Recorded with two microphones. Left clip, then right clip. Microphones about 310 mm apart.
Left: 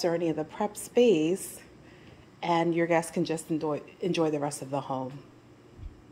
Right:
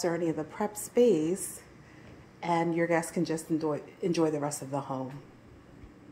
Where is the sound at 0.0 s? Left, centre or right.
Centre.